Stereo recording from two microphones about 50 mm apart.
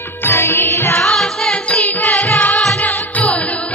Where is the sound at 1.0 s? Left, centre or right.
Centre.